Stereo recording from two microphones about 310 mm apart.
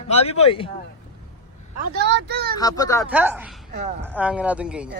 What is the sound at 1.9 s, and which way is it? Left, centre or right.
Speech, right.